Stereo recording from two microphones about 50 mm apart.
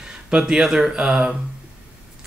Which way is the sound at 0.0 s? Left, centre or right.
Centre.